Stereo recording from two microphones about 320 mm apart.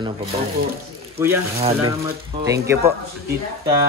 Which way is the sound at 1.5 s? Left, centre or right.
Centre.